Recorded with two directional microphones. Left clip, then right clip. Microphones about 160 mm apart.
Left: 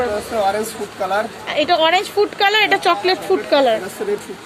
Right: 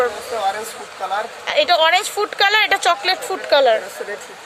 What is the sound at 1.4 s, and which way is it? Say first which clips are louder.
Speech: right 2 dB; 25° right (ahead or behind).